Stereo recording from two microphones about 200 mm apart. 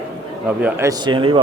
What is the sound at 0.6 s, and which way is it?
Speech, 15° right (ahead or behind).